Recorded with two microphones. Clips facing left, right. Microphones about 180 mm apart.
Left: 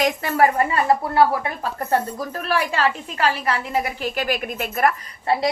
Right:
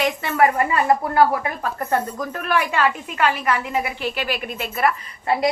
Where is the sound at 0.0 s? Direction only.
40° left (ahead or behind).